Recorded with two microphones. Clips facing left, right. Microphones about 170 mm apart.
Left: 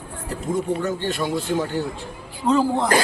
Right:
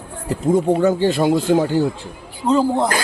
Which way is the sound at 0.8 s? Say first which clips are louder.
Right 9 dB; 90° right.